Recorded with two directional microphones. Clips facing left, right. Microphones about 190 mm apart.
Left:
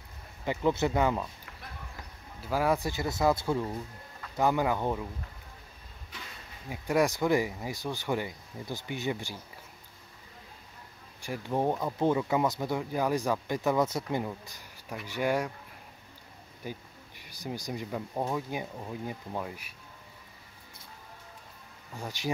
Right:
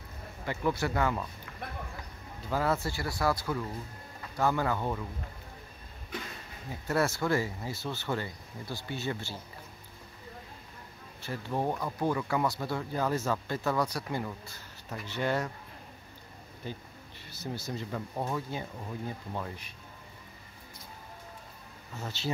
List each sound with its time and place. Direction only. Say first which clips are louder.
0.5 s speech: left 3 dB; 20° left (ahead or behind)
2.5 s speech: left 2 dB; 15° left (ahead or behind)
6.7 s speech: left 3 dB; 15° left (ahead or behind)
11.1 s speech: left 2 dB; 15° left (ahead or behind)
16.6 s speech: left 1 dB; 10° left (ahead or behind)
21.9 s speech: left 1 dB; 15° left (ahead or behind)